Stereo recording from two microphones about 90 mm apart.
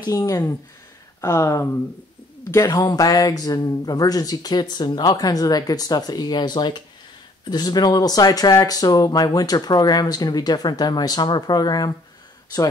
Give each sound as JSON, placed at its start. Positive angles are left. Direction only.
{"t": 0.0, "sound": "speech", "side_deg": 50}